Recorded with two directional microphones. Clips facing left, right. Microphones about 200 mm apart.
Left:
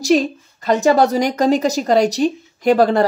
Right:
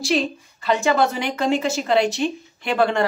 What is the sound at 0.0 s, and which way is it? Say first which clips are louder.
A woman's voice: left 6 dB; 40° left (ahead or behind).